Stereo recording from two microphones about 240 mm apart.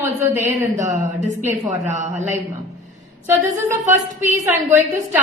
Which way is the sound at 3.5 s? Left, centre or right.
Right.